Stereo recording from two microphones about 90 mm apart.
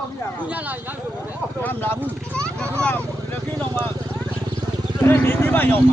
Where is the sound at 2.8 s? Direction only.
15° left (ahead or behind).